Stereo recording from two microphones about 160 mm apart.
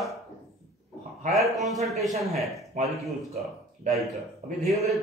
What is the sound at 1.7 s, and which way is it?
Speech, centre (ahead or behind).